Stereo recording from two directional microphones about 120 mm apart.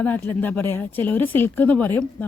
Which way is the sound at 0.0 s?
15° left (ahead or behind).